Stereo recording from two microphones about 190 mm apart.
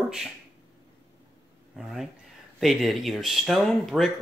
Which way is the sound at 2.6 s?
Centre (ahead or behind).